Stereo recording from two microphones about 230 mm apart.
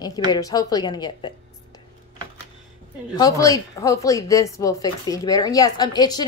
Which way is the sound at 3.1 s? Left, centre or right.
Centre.